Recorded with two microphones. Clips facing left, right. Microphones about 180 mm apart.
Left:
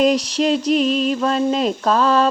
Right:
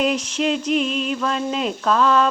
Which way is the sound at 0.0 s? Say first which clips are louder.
Left 4 dB; 35° left (ahead or behind).